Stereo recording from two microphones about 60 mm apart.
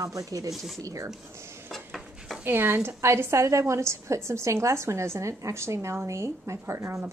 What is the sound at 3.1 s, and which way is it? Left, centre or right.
A woman's voice, right.